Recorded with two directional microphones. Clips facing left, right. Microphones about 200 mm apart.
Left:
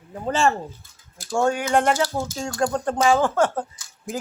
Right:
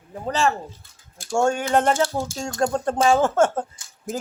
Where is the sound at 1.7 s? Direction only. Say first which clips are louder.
Right 1 dB; 25° right (ahead or behind).